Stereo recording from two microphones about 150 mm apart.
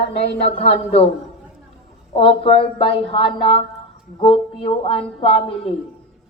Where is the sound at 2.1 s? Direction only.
40° left (ahead or behind).